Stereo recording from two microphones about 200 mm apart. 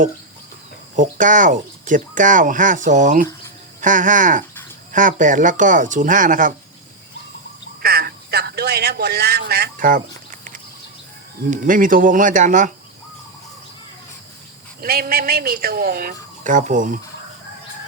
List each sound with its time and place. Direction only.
0.9 s speech: 40° right (ahead or behind)
7.8 s a sound: 50° right (ahead or behind)
11.5 s speech: 45° right (ahead or behind)
14.8 s speech: 50° right (ahead or behind)